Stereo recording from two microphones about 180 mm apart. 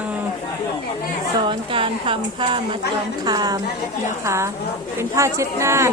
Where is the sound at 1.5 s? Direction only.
30° right (ahead or behind).